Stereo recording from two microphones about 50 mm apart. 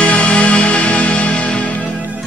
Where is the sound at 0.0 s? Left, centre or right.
Left.